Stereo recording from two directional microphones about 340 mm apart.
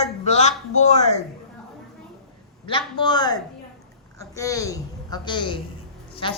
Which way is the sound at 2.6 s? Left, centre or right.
Centre.